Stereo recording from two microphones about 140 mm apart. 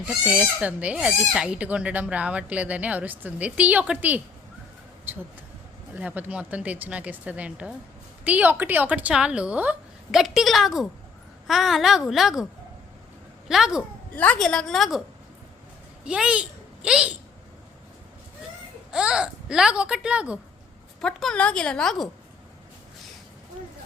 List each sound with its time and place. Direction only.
0.0 s a woman's voice: 5° right (ahead or behind)
13.5 s a woman's voice: 5° right (ahead or behind)
14.2 s a woman's voice: 5° left (ahead or behind)
16.0 s a child's voice: 5° right (ahead or behind)
18.9 s a woman's voice: 5° right (ahead or behind)
21.0 s a woman's voice: 5° left (ahead or behind)